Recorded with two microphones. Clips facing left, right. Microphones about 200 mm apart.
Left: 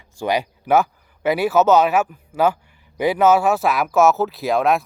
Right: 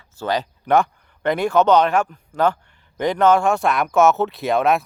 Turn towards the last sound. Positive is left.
turn(degrees=0)  # may be behind; listen again after turning